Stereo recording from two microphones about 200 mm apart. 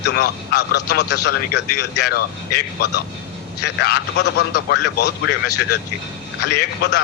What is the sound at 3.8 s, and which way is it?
A man's voice, 55° left (ahead or behind).